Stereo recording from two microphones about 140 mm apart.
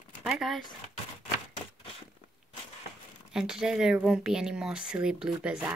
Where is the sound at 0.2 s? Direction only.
Centre (ahead or behind).